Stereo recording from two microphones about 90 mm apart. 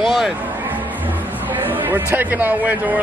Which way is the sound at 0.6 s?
20° right (ahead or behind).